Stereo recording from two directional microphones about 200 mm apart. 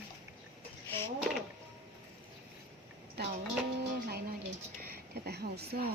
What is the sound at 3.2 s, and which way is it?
Speech, 55° right (ahead or behind).